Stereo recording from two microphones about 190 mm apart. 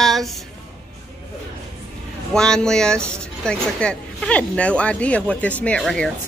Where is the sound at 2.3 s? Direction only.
5° left (ahead or behind).